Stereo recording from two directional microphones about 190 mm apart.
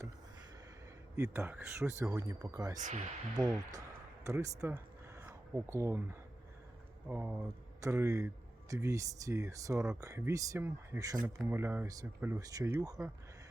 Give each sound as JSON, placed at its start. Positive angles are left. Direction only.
{"t": 1.1, "sound": "speech", "side_deg": -15}
{"t": 2.7, "sound": "speech", "side_deg": -40}
{"t": 3.7, "sound": "a sound", "side_deg": -20}
{"t": 7.1, "sound": "speech", "side_deg": -10}